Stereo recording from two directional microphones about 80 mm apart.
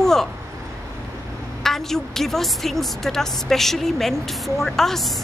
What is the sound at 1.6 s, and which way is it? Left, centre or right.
A woman's voice, centre.